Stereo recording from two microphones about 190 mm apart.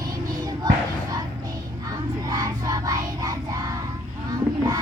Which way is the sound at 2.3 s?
20° right (ahead or behind).